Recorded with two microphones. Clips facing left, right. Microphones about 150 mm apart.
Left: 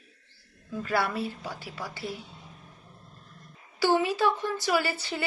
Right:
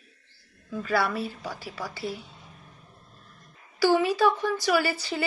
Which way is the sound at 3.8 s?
25° left (ahead or behind).